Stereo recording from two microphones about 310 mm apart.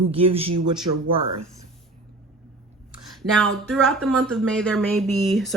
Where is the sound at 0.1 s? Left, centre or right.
Centre.